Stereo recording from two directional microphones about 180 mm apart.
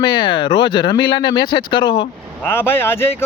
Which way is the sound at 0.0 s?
25° left (ahead or behind).